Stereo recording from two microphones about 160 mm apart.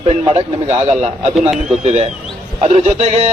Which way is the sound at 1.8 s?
40° right (ahead or behind).